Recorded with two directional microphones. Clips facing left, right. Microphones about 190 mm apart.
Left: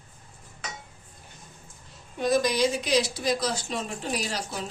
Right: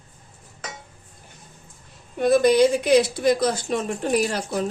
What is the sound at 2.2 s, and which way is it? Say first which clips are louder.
A woman's voice: right 7 dB; 55° right (ahead or behind).